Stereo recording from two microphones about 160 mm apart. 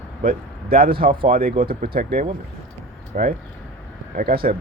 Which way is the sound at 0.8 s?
70° right (ahead or behind).